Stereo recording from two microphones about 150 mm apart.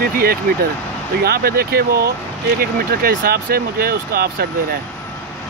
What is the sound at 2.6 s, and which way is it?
Speech, 75° right (ahead or behind).